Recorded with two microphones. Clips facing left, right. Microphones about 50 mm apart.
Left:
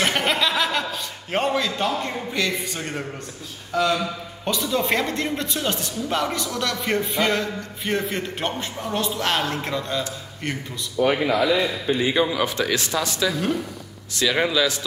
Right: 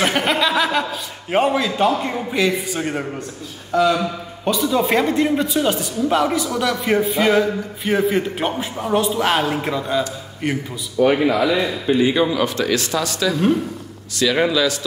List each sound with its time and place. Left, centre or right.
0.0 s chuckle: centre
1.3 s a man's voice: centre
11.0 s a man's voice: right
12.2 s a man's voice: centre
12.4 s speech: centre
14.5 s speech: centre